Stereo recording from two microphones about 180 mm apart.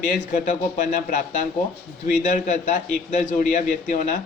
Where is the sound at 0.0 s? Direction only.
45° left (ahead or behind).